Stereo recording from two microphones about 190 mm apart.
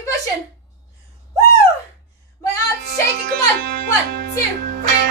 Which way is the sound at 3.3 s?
55° right (ahead or behind).